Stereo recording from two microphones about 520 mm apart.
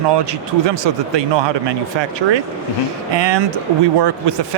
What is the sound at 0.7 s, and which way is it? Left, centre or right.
Speech, right.